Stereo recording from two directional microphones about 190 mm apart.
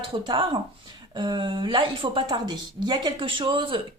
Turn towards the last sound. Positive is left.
turn(degrees=-25)  # may be behind; listen again after turning